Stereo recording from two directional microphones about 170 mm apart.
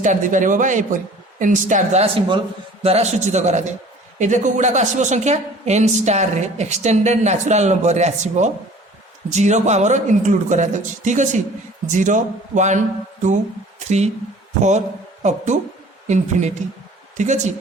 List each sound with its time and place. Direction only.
0.0 s a woman's voice: 50° right (ahead or behind)
15.2 s a woman's voice: 45° right (ahead or behind)